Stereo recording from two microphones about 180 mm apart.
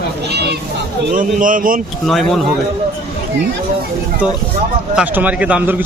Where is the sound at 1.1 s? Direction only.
50° right (ahead or behind).